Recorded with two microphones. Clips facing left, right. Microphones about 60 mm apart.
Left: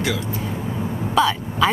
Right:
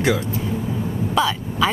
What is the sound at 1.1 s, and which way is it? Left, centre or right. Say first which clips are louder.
Throat clearing: left 3 dB; centre.